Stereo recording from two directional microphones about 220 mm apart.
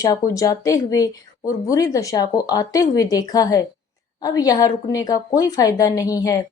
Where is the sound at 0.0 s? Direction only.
15° left (ahead or behind).